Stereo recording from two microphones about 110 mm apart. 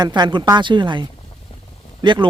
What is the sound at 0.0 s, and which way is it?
A man's voice, 40° right (ahead or behind).